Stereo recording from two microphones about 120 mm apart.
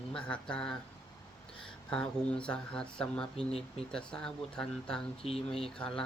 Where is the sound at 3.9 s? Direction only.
5° left (ahead or behind).